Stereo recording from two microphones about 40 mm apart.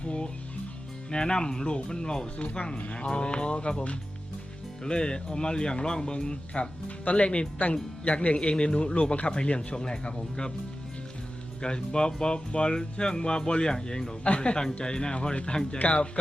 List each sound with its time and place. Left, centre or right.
0.0 s music: left
1.1 s speech: left
11.6 s speech: left
14.3 s speech: left